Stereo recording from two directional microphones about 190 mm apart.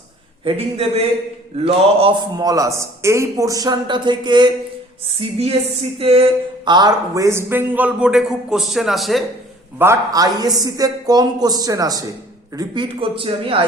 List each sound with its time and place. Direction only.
0.4 s a man's voice: 30° right (ahead or behind); by 9.2 s centre (ahead or behind)
9.7 s a man's voice: 15° right (ahead or behind); by 13.6 s 30° right (ahead or behind)